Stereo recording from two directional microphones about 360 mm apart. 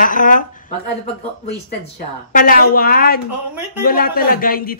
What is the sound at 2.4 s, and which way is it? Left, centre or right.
Speech, left.